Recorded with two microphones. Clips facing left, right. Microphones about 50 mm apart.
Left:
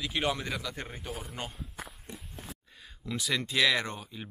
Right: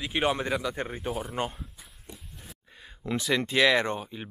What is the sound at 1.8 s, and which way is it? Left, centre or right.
Walk, left.